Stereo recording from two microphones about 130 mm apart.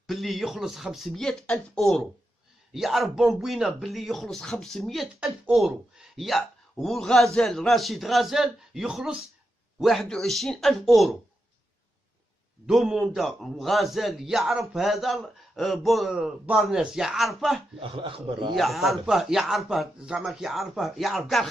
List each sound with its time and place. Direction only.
0.0 s a man's voice: centre (ahead or behind)
12.6 s a man's voice: 5° right (ahead or behind)
17.7 s a man's voice: 45° right (ahead or behind)
18.5 s a man's voice: centre (ahead or behind)